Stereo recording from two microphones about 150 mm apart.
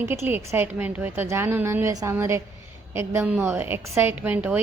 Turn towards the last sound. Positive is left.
turn(degrees=-10)  # may be behind; listen again after turning